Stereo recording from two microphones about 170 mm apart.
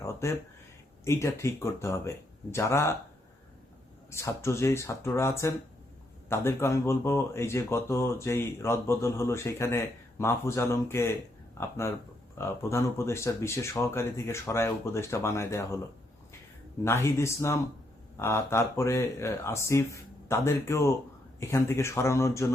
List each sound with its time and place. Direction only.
0.0 s a sound: 15° left (ahead or behind)
1.0 s speech: 15° left (ahead or behind)
4.1 s speech: 15° left (ahead or behind)
16.8 s speech: 15° left (ahead or behind)